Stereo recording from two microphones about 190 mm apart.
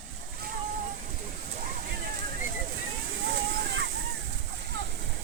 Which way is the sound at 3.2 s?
65° right (ahead or behind).